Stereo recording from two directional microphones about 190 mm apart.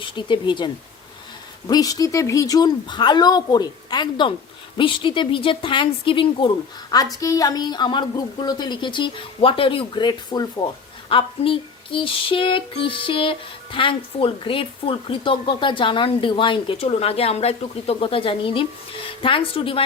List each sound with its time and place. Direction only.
0.0 s female singing: 25° left (ahead or behind)